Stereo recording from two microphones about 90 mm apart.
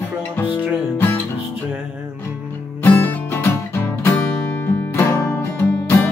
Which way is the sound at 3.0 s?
20° left (ahead or behind).